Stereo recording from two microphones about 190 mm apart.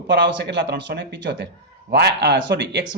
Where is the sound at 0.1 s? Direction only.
65° right (ahead or behind).